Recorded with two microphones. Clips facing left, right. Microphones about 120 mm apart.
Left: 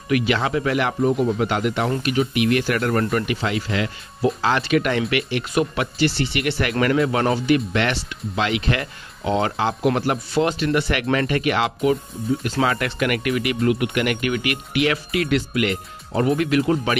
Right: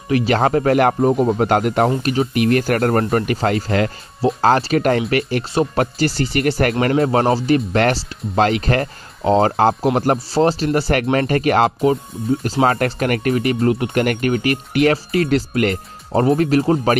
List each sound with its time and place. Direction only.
0.1 s speech: 40° right (ahead or behind)